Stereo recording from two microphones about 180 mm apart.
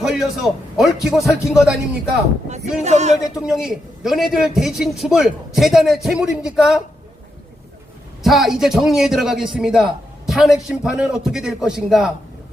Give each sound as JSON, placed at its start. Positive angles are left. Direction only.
{"t": 0.0, "sound": "a man's voice", "side_deg": 0}
{"t": 2.8, "sound": "a sound", "side_deg": -40}
{"t": 3.3, "sound": "a man's voice", "side_deg": -5}
{"t": 8.2, "sound": "a man's voice", "side_deg": 0}